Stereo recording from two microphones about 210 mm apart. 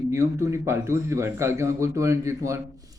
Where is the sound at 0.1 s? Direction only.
15° right (ahead or behind).